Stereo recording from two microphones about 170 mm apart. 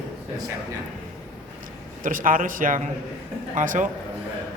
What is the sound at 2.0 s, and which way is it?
Speech, 55° right (ahead or behind).